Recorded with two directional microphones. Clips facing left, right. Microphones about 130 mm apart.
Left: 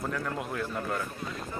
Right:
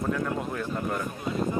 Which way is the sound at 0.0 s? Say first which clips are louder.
Right 5 dB; centre (ahead or behind).